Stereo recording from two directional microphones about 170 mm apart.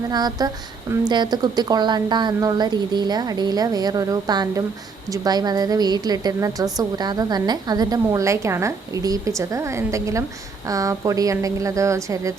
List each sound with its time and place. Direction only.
0.1 s a woman's voice: 25° right (ahead or behind)